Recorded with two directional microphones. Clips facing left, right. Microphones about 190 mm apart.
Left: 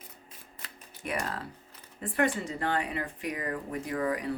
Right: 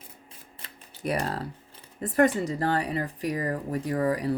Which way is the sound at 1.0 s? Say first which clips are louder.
Right 5 dB; 35° right (ahead or behind).